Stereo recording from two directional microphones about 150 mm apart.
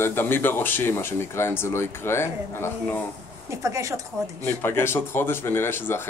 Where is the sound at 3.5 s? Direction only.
20° right (ahead or behind).